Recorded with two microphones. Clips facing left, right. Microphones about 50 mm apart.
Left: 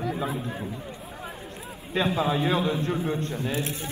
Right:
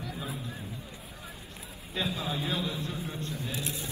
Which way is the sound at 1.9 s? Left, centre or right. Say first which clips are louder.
Left 9 dB; left.